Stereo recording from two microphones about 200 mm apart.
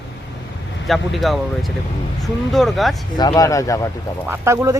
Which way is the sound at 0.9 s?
Centre (ahead or behind).